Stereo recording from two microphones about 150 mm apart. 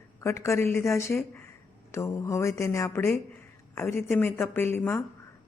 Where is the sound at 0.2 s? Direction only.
20° left (ahead or behind).